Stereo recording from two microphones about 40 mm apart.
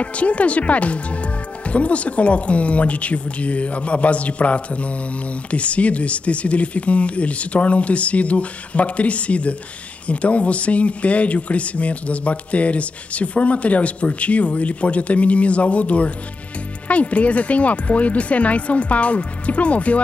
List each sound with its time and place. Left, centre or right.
0.0 s speech: left